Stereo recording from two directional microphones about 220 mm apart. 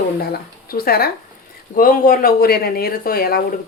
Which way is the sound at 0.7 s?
45° left (ahead or behind).